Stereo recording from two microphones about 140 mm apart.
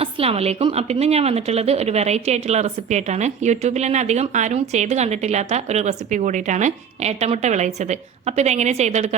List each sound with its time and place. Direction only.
0.0 s a woman's voice: 45° right (ahead or behind)